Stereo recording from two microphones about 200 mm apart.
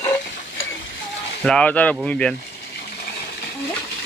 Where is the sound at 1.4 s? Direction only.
5° left (ahead or behind).